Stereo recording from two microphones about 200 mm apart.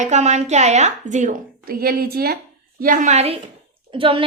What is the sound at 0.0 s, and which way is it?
A woman's voice, 35° right (ahead or behind).